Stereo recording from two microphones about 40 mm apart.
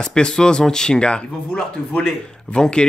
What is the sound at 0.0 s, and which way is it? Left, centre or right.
Speech, centre.